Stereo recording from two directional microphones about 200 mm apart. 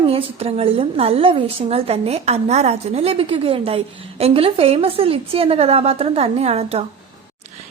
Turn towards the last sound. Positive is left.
turn(degrees=-30)  # may be behind; listen again after turning